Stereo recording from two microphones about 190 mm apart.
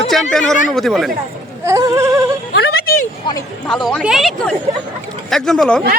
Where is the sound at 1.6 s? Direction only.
15° right (ahead or behind).